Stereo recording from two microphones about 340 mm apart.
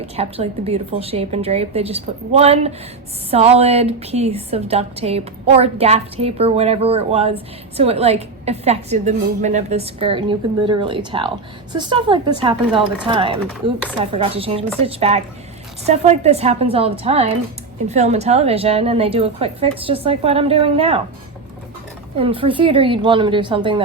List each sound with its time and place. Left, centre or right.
0.0 s a woman's voice: centre
22.2 s a woman's voice: centre